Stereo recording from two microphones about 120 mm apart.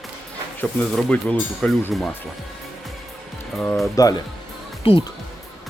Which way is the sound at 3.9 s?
30° left (ahead or behind).